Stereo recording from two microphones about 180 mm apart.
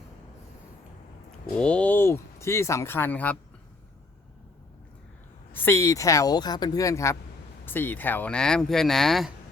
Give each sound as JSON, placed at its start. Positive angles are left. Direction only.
{"t": 1.5, "sound": "speech", "side_deg": 5}
{"t": 5.5, "sound": "speech", "side_deg": 10}